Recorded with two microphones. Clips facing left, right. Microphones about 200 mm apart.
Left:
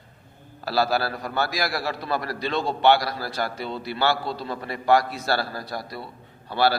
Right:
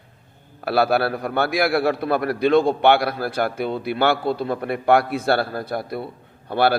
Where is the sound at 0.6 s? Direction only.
55° right (ahead or behind).